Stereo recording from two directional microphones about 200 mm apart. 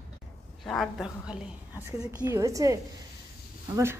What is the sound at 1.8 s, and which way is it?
A woman's voice, 15° right (ahead or behind).